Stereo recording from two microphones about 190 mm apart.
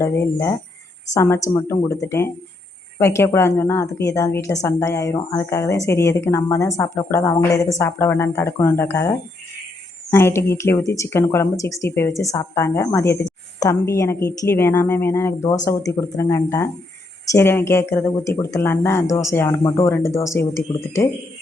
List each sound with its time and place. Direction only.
0.0 s a woman's voice: 15° left (ahead or behind)